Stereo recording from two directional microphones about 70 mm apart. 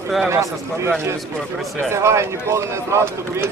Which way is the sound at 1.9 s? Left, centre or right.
Right.